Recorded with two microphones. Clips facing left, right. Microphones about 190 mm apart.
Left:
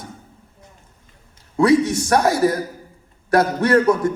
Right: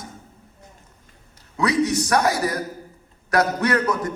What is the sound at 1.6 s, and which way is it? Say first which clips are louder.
A man's voice: left 5 dB; 25° left (ahead or behind).